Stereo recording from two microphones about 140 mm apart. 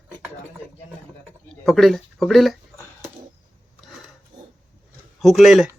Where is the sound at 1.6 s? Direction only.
Centre (ahead or behind).